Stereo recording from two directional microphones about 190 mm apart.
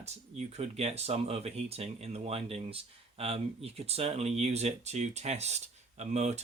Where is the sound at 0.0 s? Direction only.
35° right (ahead or behind).